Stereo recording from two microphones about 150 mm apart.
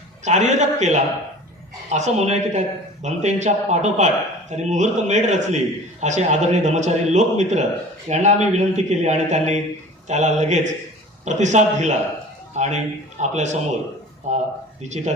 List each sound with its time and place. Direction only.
0.3 s speech: 50° right (ahead or behind)